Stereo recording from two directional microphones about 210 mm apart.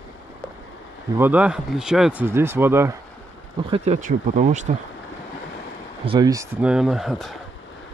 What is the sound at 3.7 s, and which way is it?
Speech, 30° right (ahead or behind).